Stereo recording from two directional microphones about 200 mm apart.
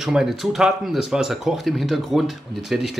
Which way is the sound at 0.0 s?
Centre (ahead or behind).